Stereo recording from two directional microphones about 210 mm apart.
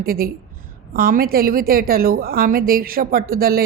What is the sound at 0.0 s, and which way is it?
A woman's voice, 45° right (ahead or behind).